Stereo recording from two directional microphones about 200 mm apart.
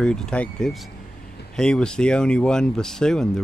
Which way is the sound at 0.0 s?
5° left (ahead or behind).